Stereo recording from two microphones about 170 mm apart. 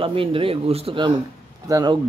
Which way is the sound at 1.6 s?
20° right (ahead or behind).